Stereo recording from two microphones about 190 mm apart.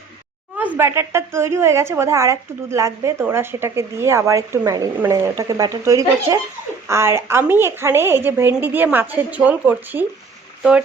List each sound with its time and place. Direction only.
0.5 s speech: 10° right (ahead or behind)